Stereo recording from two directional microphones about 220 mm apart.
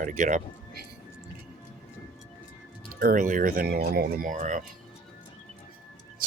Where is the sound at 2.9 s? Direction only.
40° right (ahead or behind).